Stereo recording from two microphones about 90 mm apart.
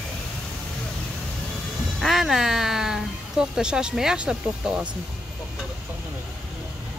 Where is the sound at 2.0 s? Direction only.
Centre (ahead or behind).